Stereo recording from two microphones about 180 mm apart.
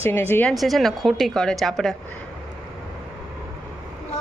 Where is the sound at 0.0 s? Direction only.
10° left (ahead or behind).